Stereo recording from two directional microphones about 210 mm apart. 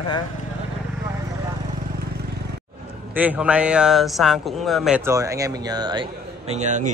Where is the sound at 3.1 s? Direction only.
5° right (ahead or behind).